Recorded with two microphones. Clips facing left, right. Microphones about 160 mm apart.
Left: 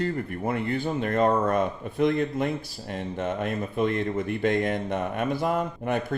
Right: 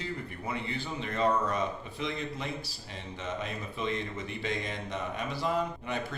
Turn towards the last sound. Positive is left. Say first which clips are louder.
# left 8 dB
turn(degrees=55)  # may be behind; listen again after turning